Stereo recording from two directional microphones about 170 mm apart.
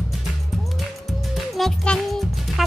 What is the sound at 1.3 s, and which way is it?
Music, centre (ahead or behind).